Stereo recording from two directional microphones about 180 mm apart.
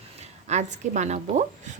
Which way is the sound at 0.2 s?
40° right (ahead or behind).